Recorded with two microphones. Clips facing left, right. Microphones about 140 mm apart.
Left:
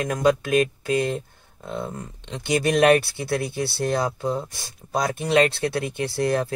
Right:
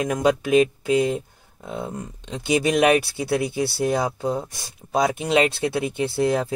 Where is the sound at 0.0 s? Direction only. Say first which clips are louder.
Even; 20° right (ahead or behind).